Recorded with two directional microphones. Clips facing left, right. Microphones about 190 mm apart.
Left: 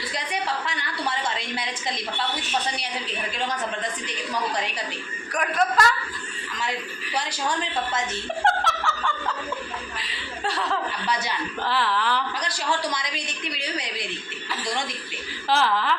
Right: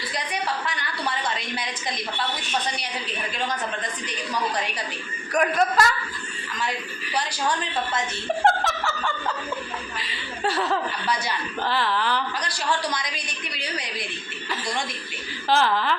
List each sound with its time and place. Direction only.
5.3 s speech: centre (ahead or behind)
8.4 s laughter: 5° right (ahead or behind)
10.0 s chuckle: centre (ahead or behind)
11.6 s speech: centre (ahead or behind)
12.4 s a woman's voice: 20° left (ahead or behind)
15.4 s speech: centre (ahead or behind)